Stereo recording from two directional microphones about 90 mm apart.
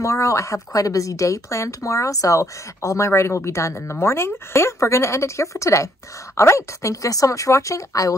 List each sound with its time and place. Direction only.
0.0 s a woman's voice: 35° left (ahead or behind)